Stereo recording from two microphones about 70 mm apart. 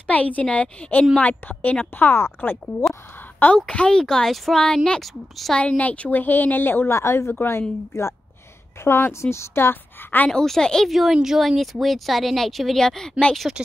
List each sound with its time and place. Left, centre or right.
0.0 s a woman's voice: centre
3.5 s speech: centre
5.6 s speech: centre; by 7.6 s left
8.8 s speech: left
10.3 s speech: centre